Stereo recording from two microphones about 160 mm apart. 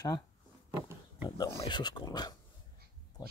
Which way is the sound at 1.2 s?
25° left (ahead or behind).